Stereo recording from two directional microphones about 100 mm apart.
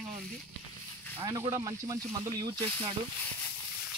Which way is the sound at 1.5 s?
35° right (ahead or behind).